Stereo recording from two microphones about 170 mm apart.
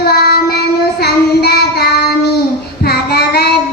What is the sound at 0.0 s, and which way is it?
Child singing, 65° left (ahead or behind).